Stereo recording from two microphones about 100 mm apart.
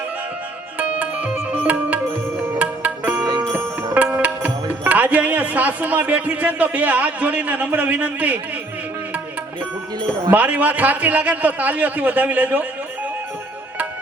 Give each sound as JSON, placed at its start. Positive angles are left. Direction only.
{"t": 0.8, "sound": "music", "side_deg": -15}
{"t": 3.2, "sound": "music", "side_deg": -40}
{"t": 3.9, "sound": "speech", "side_deg": -15}
{"t": 10.3, "sound": "a man's voice", "side_deg": -15}